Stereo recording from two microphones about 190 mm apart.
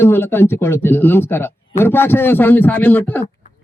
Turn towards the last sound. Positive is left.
turn(degrees=10)  # may be behind; listen again after turning